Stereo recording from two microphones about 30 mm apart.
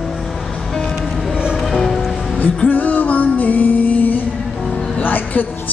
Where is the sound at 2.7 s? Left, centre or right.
Left.